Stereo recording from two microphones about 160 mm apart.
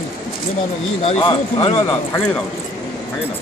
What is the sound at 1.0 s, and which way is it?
Speech, 35° left (ahead or behind).